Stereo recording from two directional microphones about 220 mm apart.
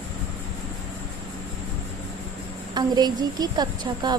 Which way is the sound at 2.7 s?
20° right (ahead or behind).